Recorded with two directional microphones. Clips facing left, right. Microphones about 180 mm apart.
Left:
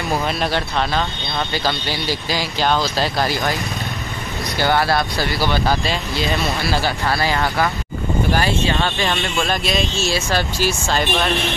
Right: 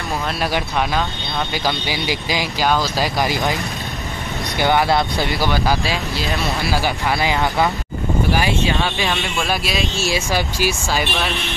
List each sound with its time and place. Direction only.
0.4 s speech: 10° right (ahead or behind)
4.6 s speech: 20° right (ahead or behind)
5.5 s speech: 10° right (ahead or behind)
6.6 s speech: 15° right (ahead or behind)